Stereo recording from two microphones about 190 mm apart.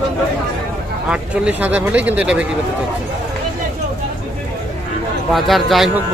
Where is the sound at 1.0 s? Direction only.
5° right (ahead or behind).